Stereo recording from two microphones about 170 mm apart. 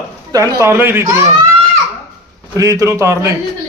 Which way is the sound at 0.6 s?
15° right (ahead or behind).